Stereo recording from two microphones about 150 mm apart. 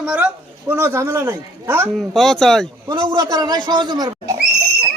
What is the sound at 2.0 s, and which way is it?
Speech, centre (ahead or behind).